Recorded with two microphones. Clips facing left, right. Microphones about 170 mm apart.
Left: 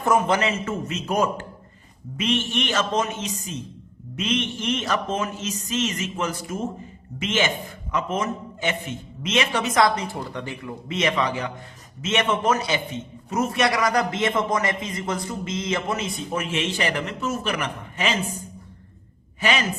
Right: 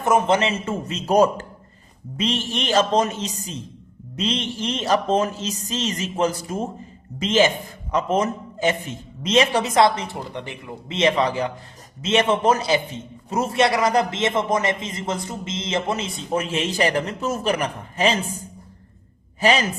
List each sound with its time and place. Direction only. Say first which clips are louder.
0.0 s a man's voice: right 2 dB; 25° right (ahead or behind)
19.4 s a woman's voice: right 4 dB; 35° right (ahead or behind)